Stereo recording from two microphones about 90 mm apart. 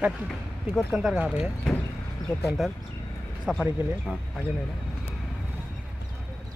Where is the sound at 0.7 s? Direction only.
Centre (ahead or behind).